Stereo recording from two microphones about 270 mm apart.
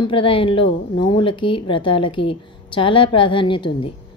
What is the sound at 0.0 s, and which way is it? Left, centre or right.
A woman's voice, centre.